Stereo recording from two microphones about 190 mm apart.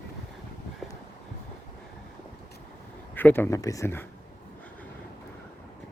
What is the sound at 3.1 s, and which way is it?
Speech, 10° left (ahead or behind).